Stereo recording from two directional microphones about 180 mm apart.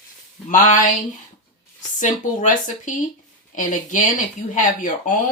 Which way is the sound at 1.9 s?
45° left (ahead or behind).